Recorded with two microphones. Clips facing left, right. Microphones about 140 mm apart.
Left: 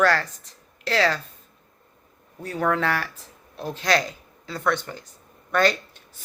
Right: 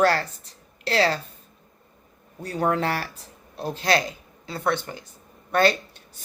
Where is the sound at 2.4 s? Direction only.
35° right (ahead or behind).